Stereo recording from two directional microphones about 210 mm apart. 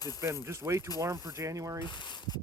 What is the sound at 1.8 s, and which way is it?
Speech, 20° left (ahead or behind).